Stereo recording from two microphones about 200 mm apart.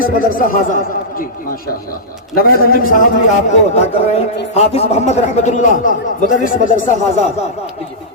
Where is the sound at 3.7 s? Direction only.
35° left (ahead or behind).